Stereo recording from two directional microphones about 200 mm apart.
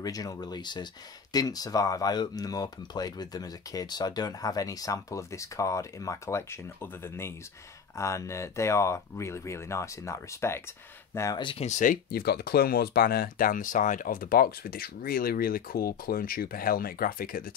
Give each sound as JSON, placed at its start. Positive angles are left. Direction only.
{"t": 0.0, "sound": "speech", "side_deg": 20}